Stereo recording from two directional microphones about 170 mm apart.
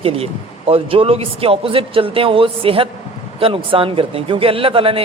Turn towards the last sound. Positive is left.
turn(degrees=-30)  # may be behind; listen again after turning